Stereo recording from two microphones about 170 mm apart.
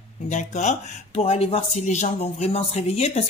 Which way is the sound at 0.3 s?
45° left (ahead or behind).